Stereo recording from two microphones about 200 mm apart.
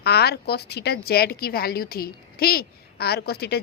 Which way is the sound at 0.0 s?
55° left (ahead or behind).